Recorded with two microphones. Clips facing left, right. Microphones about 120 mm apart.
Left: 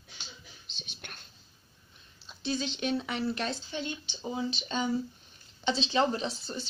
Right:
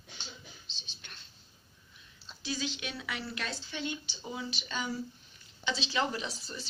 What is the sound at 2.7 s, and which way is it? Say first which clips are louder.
Speech: left 8 dB; 30° left (ahead or behind).